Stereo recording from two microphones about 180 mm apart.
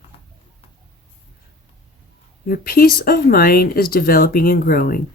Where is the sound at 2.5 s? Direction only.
55° left (ahead or behind).